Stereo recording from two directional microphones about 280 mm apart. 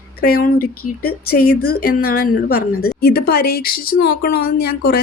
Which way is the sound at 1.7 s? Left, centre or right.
Left.